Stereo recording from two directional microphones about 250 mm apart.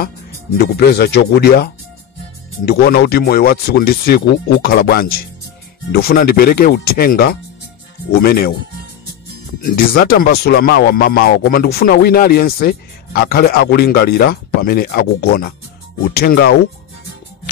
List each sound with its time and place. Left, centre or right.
0.7 s speech: left
9.6 s speech: left